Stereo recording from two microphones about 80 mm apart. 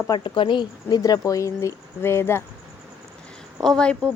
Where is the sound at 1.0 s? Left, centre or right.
Left.